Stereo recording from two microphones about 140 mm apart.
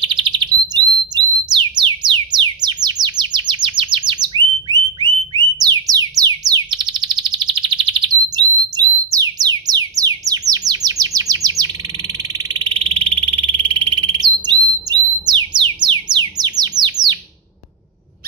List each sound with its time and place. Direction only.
0.0 s bird: 35° right (ahead or behind)
8.4 s music: 30° right (ahead or behind)
10.5 s bird: 25° right (ahead or behind)